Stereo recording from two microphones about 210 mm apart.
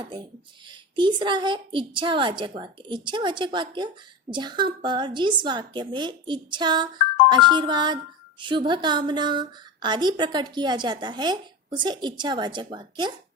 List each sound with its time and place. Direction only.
0.0 s a woman's voice: 20° right (ahead or behind)